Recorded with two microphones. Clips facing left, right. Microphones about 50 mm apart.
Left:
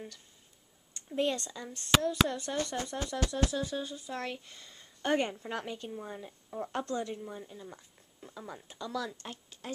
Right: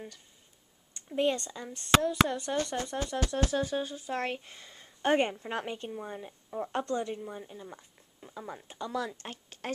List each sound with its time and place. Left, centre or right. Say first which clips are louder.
0.9 s a woman's voice: right 3 dB; centre
3.3 s a woman's voice: right 4 dB; right